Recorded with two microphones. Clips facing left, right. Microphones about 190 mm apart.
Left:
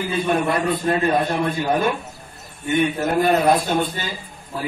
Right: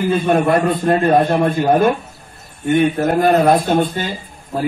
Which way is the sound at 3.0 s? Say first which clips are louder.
Right 4 dB; 50° right (ahead or behind).